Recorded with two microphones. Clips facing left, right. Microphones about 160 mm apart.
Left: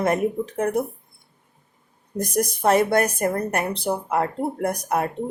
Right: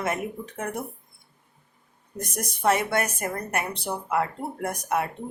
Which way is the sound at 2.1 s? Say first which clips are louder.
Left 10 dB; 30° left (ahead or behind).